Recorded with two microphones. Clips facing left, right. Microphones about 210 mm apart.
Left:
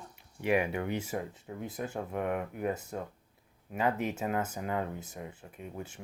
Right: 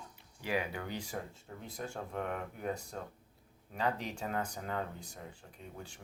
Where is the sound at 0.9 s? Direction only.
5° left (ahead or behind).